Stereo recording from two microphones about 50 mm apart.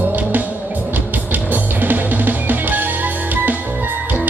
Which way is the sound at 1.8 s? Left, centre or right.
Right.